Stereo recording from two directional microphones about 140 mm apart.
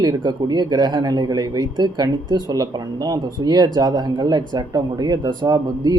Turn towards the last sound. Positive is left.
turn(degrees=-30)  # may be behind; listen again after turning